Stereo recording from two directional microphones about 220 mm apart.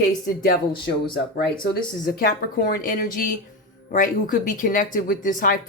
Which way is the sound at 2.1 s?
40° left (ahead or behind).